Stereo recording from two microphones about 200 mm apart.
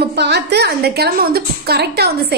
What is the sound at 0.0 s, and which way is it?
A woman's voice, 55° right (ahead or behind).